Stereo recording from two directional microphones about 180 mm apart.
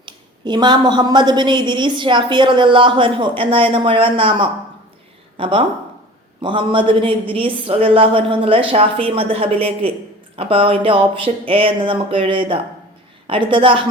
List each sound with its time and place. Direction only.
0.0 s a woman's voice: 25° right (ahead or behind)